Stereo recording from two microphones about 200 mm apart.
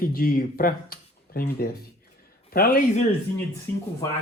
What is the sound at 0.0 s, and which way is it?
Speech, 45° left (ahead or behind).